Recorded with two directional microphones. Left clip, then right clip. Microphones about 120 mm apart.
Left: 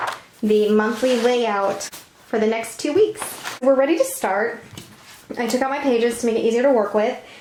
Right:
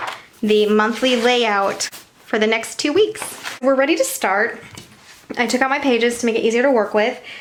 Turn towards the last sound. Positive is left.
turn(degrees=-40)  # may be behind; listen again after turning